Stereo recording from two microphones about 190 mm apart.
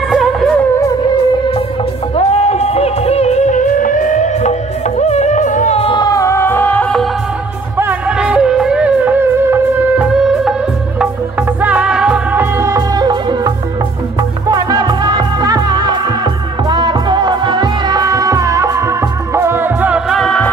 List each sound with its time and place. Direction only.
0.1 s music: centre (ahead or behind)
2.1 s music: 35° left (ahead or behind); by 7.1 s 5° left (ahead or behind)
7.7 s music: 5° right (ahead or behind)
11.6 s music: 5° right (ahead or behind); by 13.5 s 20° right (ahead or behind)
14.5 s music: 20° right (ahead or behind); by 20.4 s centre (ahead or behind)